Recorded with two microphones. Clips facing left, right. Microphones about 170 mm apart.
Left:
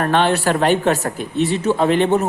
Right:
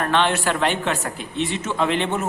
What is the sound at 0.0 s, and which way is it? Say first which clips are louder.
Speech: left 4 dB; 40° left (ahead or behind).